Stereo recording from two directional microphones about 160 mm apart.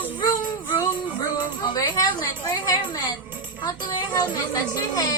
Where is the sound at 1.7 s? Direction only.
20° left (ahead or behind).